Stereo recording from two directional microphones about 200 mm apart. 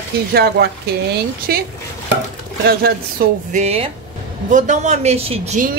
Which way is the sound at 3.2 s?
50° right (ahead or behind).